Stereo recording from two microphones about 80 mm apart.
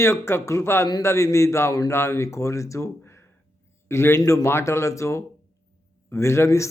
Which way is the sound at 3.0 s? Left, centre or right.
Left.